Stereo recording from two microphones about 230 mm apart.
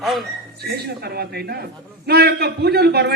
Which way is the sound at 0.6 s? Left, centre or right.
Right.